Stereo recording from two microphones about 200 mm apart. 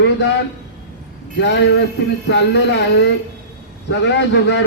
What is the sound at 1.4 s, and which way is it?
A man's voice, 60° left (ahead or behind).